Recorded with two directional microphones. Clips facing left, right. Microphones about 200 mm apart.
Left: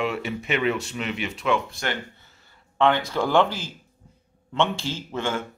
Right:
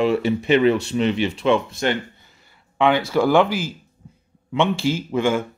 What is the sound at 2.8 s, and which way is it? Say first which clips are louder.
A man's voice: right 4 dB; 10° right (ahead or behind).